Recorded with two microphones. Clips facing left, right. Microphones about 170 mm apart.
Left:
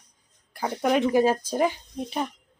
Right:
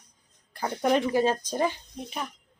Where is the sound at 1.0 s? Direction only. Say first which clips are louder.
Left 4 dB; 15° left (ahead or behind).